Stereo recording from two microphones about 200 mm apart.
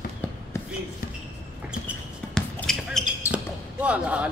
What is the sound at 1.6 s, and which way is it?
Basketball bounce, centre (ahead or behind).